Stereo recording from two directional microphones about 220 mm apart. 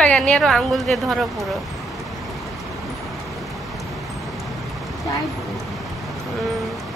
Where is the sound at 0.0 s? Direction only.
5° left (ahead or behind).